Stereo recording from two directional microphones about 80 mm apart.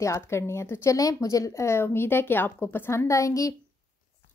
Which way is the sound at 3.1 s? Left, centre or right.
Left.